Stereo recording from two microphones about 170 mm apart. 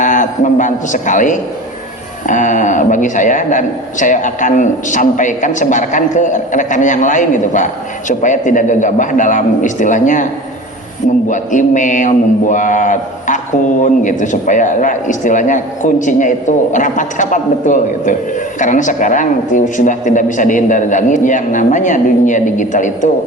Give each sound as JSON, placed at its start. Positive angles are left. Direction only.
{"t": 0.0, "sound": "a man's voice", "side_deg": 50}
{"t": 11.3, "sound": "speech", "side_deg": 50}